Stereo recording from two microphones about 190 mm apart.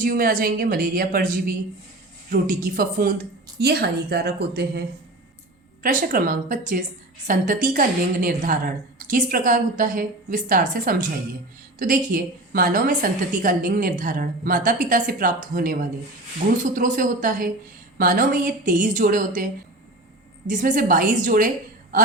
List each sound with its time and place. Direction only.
0.0 s a woman's voice: 50° right (ahead or behind)
3.6 s a woman's voice: 60° right (ahead or behind)
5.8 s a woman's voice: 45° right (ahead or behind)
20.5 s a woman's voice: 45° right (ahead or behind)